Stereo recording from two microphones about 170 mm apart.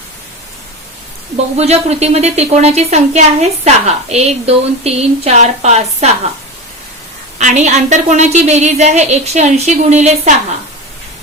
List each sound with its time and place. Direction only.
1.5 s a woman's voice: 40° right (ahead or behind)
7.3 s a woman's voice: 45° right (ahead or behind)